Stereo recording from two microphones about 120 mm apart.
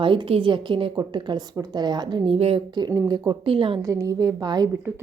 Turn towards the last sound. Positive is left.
turn(degrees=-35)  # may be behind; listen again after turning